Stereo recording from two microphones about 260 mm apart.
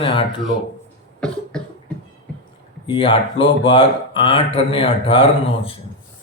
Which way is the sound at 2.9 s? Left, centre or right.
Centre.